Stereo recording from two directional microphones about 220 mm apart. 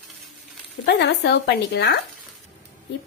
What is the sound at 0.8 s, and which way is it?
Speech, 55° left (ahead or behind).